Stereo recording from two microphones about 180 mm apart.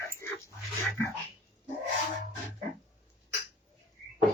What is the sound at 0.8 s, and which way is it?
Speech, 15° left (ahead or behind).